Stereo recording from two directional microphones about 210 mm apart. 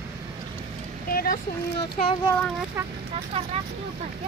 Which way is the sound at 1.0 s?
45° left (ahead or behind).